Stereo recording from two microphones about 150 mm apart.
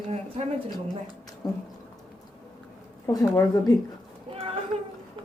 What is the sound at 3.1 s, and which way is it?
Speech, 25° left (ahead or behind).